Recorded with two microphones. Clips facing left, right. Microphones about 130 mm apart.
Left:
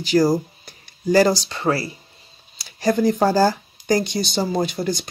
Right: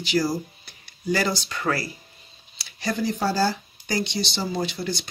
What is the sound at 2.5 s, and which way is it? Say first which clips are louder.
Speech: left 8 dB; 45° left (ahead or behind).